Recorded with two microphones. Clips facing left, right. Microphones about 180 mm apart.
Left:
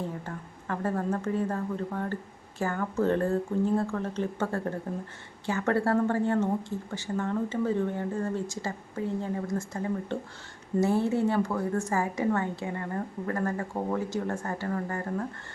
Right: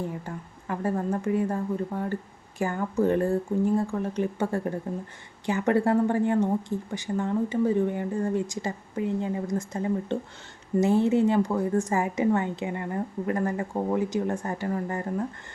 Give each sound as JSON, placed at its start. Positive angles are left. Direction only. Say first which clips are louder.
{"t": 0.0, "sound": "a woman's voice", "louder": "right 2 dB", "side_deg": -10}